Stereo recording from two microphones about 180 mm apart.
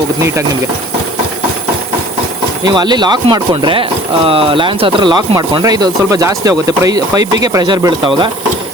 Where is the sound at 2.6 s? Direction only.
25° right (ahead or behind).